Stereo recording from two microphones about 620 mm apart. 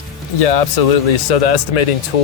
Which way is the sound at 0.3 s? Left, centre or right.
Left.